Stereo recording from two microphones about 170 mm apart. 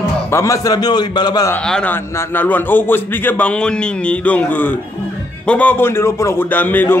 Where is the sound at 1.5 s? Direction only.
5° left (ahead or behind).